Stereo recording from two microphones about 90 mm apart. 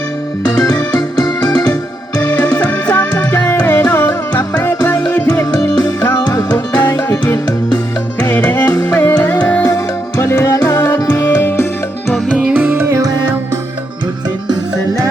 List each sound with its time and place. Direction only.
0.5 s music: 40° left (ahead or behind); by 5.3 s 25° left (ahead or behind)
5.3 s music: 40° left (ahead or behind)
6.5 s music: 25° left (ahead or behind)
8.3 s yodeling: 25° left (ahead or behind)
8.8 s music: 25° left (ahead or behind)
9.6 s music: 30° left (ahead or behind)
12.3 s music: 10° right (ahead or behind); by 13.0 s 25° right (ahead or behind)